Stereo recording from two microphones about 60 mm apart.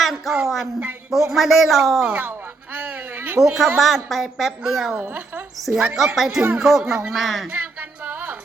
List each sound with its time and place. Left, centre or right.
0.0 s speech: centre
2.7 s a man's voice: right
3.4 s speech: centre
4.9 s speech: right
5.5 s speech: centre
7.5 s music: right